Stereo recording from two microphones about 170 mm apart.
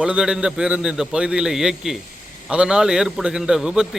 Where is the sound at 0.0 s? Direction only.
5° right (ahead or behind).